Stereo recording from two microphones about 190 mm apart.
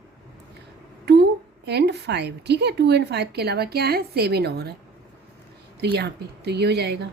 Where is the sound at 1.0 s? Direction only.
60° right (ahead or behind).